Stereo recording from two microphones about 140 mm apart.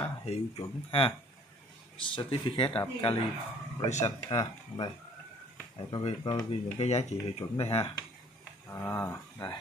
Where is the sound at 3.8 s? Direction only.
55° left (ahead or behind).